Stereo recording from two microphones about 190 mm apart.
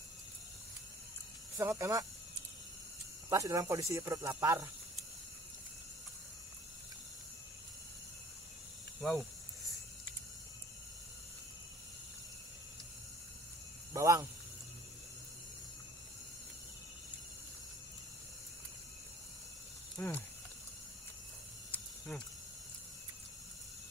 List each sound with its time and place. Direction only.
1.6 s speech: 15° right (ahead or behind)
3.3 s speech: 15° right (ahead or behind)
13.9 s speech: 15° right (ahead or behind)
20.0 s speech: 10° left (ahead or behind)
21.7 s snake: 5° left (ahead or behind)